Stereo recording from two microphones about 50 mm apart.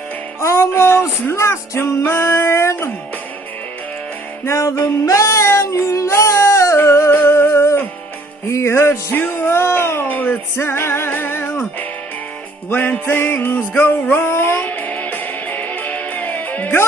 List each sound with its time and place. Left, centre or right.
0.4 s music: left
1.3 s music: left
1.8 s music: left
4.5 s music: left
6.8 s humming: left
8.5 s music: left
9.1 s speech: left
9.5 s music: left
10.0 s speech: left
10.6 s music: left
12.6 s music: left
14.7 s music: left